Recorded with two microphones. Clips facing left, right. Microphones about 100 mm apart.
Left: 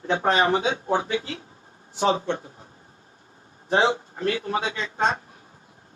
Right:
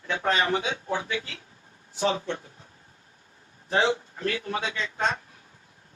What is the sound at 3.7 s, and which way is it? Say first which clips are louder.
Speech: left 3 dB; 30° left (ahead or behind).